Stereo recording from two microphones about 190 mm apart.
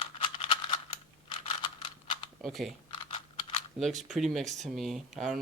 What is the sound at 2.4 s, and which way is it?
Speech, centre (ahead or behind).